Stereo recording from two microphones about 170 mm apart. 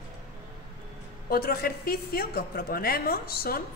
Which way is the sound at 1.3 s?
60° left (ahead or behind).